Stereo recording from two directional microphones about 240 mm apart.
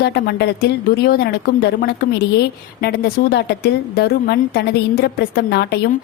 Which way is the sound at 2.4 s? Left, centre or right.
Left.